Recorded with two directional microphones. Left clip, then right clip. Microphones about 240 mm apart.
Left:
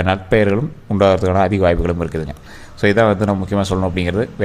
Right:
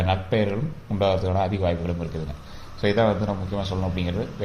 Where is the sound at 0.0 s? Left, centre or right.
Left.